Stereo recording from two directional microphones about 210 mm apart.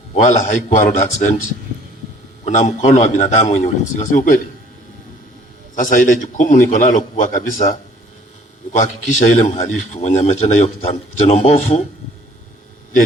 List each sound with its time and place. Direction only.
0.1 s a man's voice: 35° left (ahead or behind)
2.4 s a man's voice: 30° left (ahead or behind)
5.7 s a man's voice: 35° left (ahead or behind)